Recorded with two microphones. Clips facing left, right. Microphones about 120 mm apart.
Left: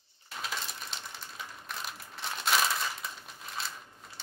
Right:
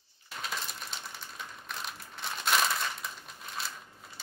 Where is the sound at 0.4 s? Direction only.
Centre (ahead or behind).